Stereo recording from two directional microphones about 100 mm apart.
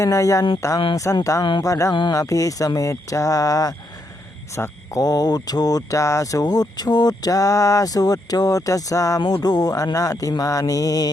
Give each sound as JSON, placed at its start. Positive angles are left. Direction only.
{"t": 0.0, "sound": "speech", "side_deg": 35}